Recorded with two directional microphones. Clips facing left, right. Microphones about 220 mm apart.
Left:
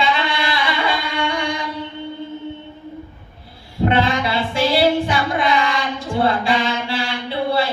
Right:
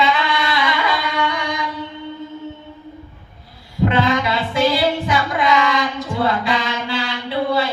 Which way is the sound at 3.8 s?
30° left (ahead or behind).